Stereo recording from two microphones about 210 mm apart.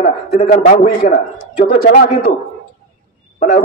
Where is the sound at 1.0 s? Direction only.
50° left (ahead or behind).